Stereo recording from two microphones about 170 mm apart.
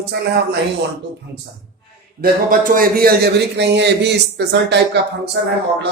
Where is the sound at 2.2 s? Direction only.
55° right (ahead or behind); by 5.0 s 85° right.